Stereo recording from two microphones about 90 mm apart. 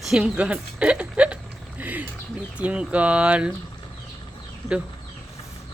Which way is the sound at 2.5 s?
15° right (ahead or behind).